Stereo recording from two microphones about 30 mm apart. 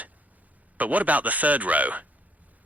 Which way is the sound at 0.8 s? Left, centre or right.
Right.